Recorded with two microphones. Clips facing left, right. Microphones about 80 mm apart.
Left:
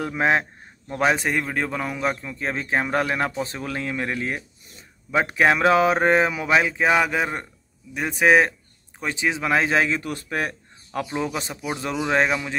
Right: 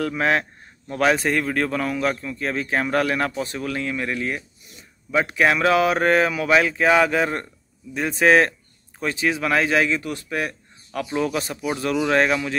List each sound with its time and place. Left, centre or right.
0.0 s a man's voice: left
11.1 s a man's voice: left